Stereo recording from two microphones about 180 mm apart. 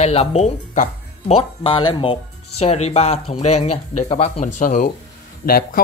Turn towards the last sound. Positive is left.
turn(degrees=55)  # may be behind; listen again after turning